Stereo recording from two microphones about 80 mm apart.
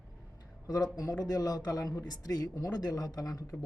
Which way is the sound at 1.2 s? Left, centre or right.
Left.